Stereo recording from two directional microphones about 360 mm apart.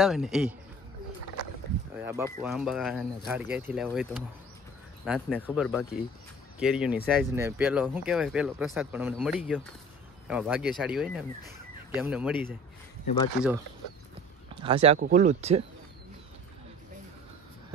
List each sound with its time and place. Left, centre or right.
0.0 s speech: centre
2.0 s speech: centre
13.0 s speech: centre
14.5 s speech: centre